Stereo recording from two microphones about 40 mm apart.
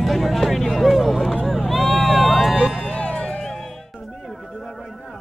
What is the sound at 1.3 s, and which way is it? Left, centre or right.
Vehicle, centre.